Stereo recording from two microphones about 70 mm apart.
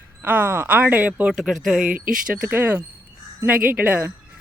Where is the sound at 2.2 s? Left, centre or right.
Centre.